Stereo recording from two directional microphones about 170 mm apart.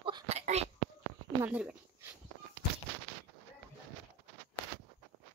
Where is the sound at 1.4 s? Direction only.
10° right (ahead or behind).